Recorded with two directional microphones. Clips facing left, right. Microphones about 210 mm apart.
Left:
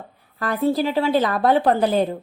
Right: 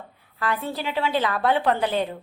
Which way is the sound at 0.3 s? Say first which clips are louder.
Left 8 dB; 40° left (ahead or behind).